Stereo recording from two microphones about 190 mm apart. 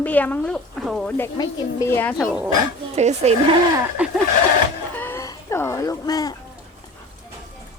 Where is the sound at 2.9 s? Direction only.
35° right (ahead or behind).